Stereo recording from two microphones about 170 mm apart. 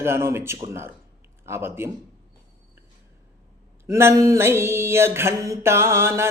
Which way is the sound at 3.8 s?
15° right (ahead or behind).